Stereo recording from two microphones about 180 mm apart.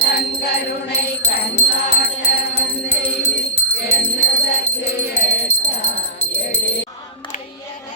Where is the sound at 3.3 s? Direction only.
65° left (ahead or behind).